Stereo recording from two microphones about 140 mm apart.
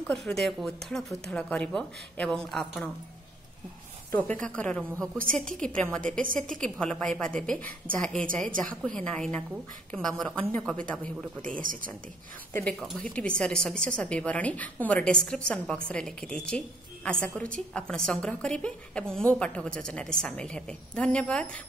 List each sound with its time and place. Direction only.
0.0 s speech: 5° left (ahead or behind)
4.2 s a woman's voice: 10° left (ahead or behind)
11.6 s speech: 75° right (ahead or behind)
12.7 s a woman's voice: 5° left (ahead or behind)